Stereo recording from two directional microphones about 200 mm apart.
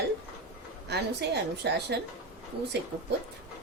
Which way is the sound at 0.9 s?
55° right (ahead or behind).